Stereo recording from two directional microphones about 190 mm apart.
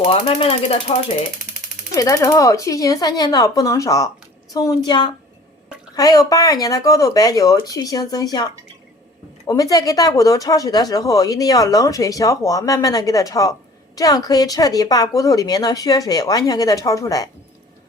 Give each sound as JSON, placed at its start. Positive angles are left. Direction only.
{"t": 0.1, "sound": "speech", "side_deg": 30}
{"t": 2.0, "sound": "speech", "side_deg": 15}
{"t": 9.5, "sound": "speech", "side_deg": 20}